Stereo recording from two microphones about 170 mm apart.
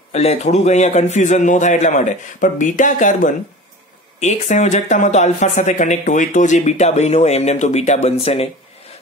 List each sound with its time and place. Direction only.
0.1 s speech: 40° left (ahead or behind)